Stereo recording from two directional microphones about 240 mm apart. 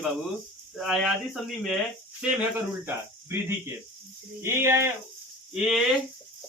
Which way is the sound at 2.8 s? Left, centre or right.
Centre.